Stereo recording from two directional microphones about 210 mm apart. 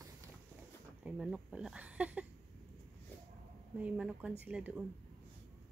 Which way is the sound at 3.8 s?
5° right (ahead or behind).